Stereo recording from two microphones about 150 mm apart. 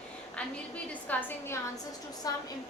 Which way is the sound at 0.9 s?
10° left (ahead or behind).